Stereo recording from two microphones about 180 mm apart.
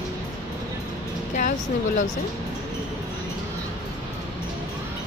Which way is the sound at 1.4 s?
45° left (ahead or behind).